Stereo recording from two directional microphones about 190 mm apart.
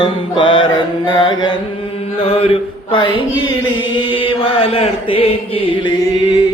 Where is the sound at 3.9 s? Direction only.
25° left (ahead or behind).